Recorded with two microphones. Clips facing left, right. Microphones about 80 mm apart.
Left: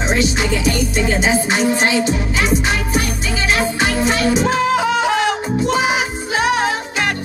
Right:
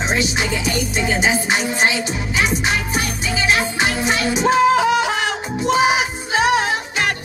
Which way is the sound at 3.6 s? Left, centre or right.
Right.